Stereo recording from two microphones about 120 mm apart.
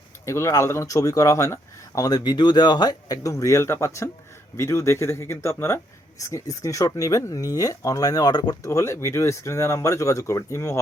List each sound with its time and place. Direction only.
0.3 s speech: 25° left (ahead or behind)